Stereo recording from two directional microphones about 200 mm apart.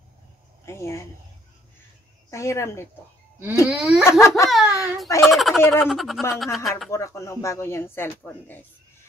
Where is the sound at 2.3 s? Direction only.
15° left (ahead or behind).